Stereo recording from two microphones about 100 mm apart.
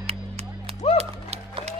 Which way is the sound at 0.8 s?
90° left.